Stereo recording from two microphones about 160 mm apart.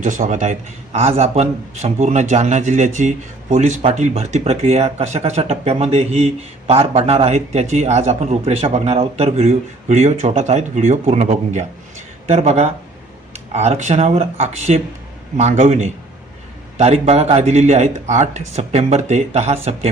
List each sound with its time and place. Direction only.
0.0 s a man's voice: 50° right (ahead or behind)